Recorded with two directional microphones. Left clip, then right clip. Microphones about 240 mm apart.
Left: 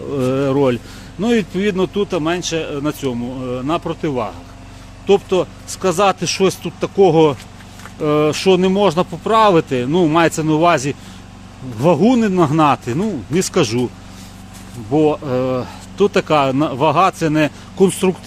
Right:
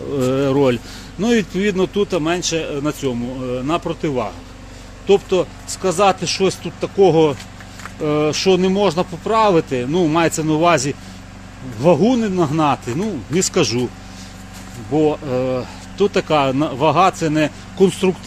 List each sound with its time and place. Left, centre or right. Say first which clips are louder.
0.1 s speech: even; centre
5.0 s speech: left 1 dB; centre
11.8 s speech: left 1 dB; left
14.9 s speech: left 2 dB; centre